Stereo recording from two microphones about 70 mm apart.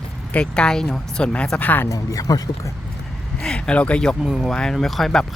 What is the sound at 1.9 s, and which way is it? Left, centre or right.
Speech, left.